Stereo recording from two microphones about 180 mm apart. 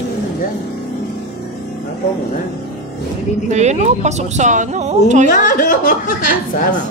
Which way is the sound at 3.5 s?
40° right (ahead or behind).